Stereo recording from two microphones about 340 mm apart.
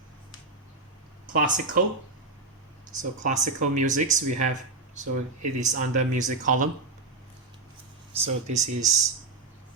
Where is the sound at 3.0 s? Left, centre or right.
Right.